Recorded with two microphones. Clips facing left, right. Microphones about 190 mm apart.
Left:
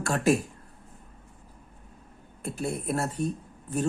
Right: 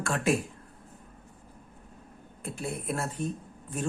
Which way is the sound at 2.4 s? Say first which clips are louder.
Left 4 dB; 40° left (ahead or behind).